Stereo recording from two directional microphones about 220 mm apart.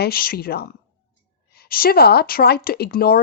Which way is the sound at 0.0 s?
45° left (ahead or behind).